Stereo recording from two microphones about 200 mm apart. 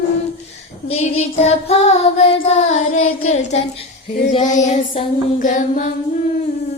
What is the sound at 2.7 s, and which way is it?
Child singing, 90° left.